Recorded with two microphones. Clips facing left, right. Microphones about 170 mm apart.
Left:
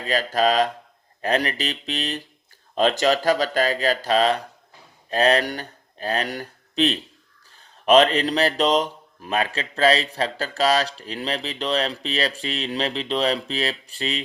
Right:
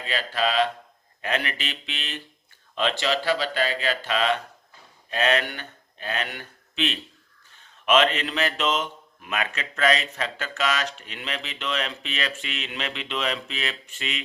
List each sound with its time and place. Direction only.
0.0 s speech: 40° left (ahead or behind)